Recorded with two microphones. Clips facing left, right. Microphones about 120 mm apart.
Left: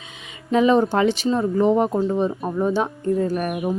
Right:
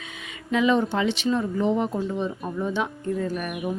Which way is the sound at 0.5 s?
40° left (ahead or behind).